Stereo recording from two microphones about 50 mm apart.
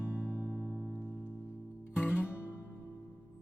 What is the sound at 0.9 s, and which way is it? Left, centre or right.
Music, left.